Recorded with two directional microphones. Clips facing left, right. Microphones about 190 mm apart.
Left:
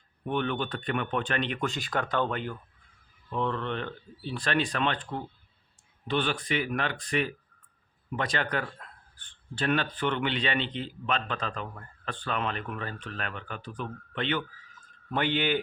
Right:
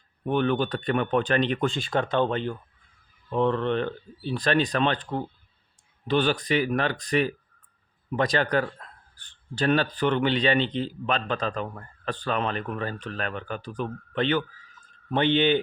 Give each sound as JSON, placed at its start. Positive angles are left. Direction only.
{"t": 0.3, "sound": "speech", "side_deg": -35}
{"t": 3.3, "sound": "speech", "side_deg": -35}
{"t": 6.1, "sound": "speech", "side_deg": -40}
{"t": 15.1, "sound": "speech", "side_deg": -25}